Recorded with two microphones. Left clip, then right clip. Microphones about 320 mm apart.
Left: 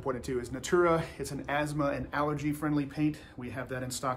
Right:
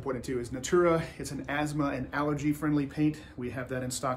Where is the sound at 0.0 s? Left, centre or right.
Centre.